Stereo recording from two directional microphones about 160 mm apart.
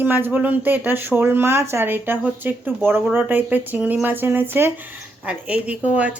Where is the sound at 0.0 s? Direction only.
10° right (ahead or behind).